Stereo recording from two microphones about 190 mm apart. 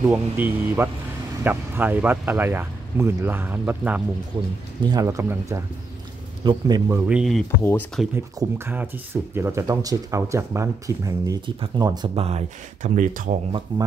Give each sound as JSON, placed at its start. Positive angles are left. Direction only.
{"t": 0.0, "sound": "a man's voice", "side_deg": -10}
{"t": 7.1, "sound": "speech", "side_deg": 0}
{"t": 7.6, "sound": "speech", "side_deg": 10}
{"t": 8.4, "sound": "speech", "side_deg": -10}
{"t": 13.7, "sound": "a man's voice", "side_deg": -25}